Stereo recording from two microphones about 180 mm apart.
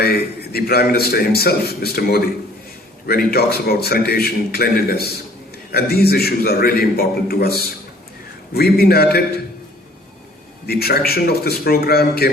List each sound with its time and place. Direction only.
0.0 s a man's voice: 60° left (ahead or behind)
3.3 s a man's voice: 60° left (ahead or behind)
8.5 s a man's voice: 60° left (ahead or behind)
10.7 s a man's voice: 60° left (ahead or behind)